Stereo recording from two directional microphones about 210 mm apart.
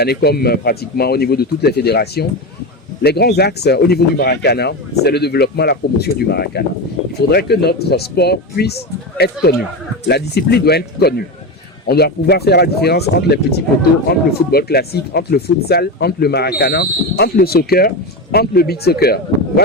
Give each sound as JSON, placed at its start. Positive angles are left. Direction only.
{"t": 0.0, "sound": "speech", "side_deg": 50}